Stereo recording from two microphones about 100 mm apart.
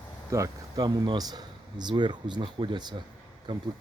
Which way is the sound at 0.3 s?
30° right (ahead or behind).